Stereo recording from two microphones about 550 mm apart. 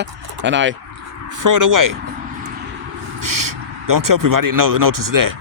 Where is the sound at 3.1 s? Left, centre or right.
Right.